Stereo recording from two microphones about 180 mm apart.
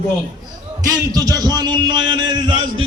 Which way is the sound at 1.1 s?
20° right (ahead or behind).